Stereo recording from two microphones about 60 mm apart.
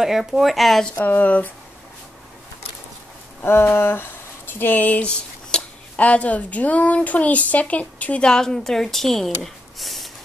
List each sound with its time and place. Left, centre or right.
0.0 s speech: centre
1.0 s speech: left
3.4 s speech: left
8.3 s speech: centre